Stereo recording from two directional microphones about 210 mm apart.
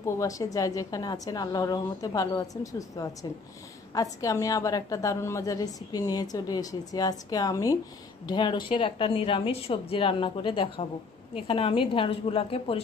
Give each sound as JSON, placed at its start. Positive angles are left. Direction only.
{"t": 0.0, "sound": "a woman's voice", "side_deg": 15}